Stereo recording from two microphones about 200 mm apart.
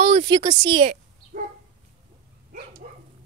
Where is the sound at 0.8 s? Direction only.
35° right (ahead or behind).